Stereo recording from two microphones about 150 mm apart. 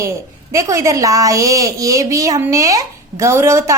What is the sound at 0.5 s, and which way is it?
A woman's voice, 20° right (ahead or behind).